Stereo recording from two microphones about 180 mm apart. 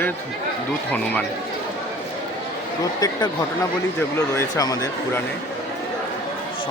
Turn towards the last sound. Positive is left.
turn(degrees=20)  # may be behind; listen again after turning